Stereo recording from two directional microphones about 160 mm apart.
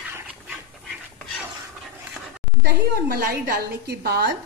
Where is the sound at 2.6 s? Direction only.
75° right (ahead or behind).